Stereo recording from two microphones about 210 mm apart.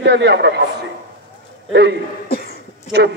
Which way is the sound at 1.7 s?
55° right (ahead or behind).